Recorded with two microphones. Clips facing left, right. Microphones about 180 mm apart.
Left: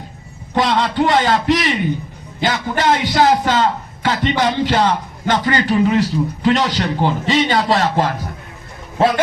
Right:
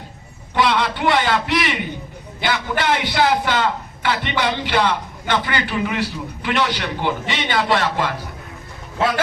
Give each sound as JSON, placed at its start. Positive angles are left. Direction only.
{"t": 0.5, "sound": "a man's voice", "side_deg": 40}